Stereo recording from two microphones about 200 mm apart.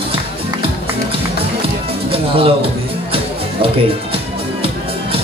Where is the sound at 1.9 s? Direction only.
30° right (ahead or behind).